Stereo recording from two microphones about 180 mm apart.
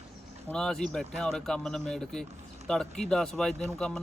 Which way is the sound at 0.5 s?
5° left (ahead or behind).